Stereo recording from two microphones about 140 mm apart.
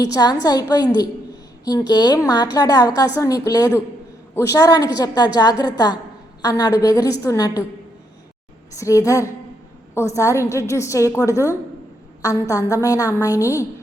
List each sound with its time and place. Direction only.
0.0 s a woman's voice: 25° left (ahead or behind)
8.8 s a woman's voice: 25° left (ahead or behind)